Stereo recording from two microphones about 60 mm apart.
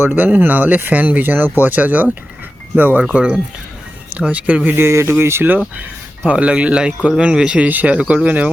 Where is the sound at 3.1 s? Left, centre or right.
Centre.